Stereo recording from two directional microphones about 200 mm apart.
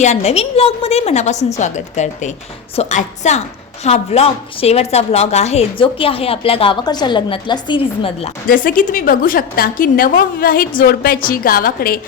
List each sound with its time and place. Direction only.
0.0 s a woman's voice: 35° left (ahead or behind)
8.4 s a woman's voice: 45° left (ahead or behind)